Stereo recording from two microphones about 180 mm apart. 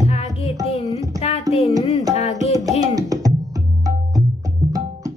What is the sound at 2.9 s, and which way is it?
Music, 20° right (ahead or behind).